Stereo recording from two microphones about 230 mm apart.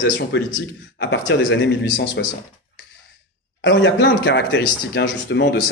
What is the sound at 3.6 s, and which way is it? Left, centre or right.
Speech, left.